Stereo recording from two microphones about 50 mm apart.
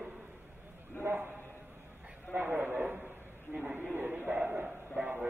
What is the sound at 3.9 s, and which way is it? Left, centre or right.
A man's voice, right.